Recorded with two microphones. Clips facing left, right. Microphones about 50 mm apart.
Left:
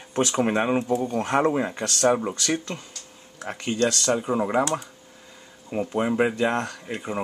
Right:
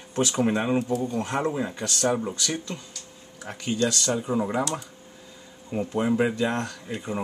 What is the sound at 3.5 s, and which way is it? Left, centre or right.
Speech, left.